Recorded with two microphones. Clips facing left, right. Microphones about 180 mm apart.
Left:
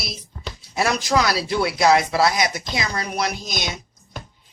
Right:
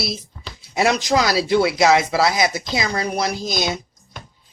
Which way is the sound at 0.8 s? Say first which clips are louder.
Right 2 dB; 20° right (ahead or behind).